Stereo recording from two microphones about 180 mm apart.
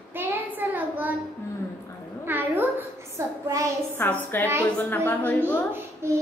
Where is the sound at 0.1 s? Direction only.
10° right (ahead or behind).